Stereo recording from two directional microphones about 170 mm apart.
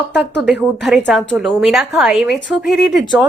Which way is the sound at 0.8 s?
Centre (ahead or behind).